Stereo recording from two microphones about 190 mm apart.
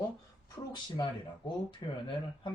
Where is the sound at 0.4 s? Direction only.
20° left (ahead or behind).